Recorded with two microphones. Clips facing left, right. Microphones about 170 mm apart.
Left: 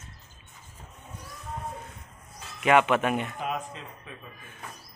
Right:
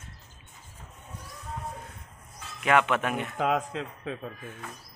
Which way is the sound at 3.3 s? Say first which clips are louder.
Right 6 dB; 90° right.